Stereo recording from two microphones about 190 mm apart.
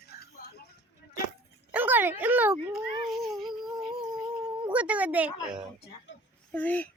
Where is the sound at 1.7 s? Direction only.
10° right (ahead or behind).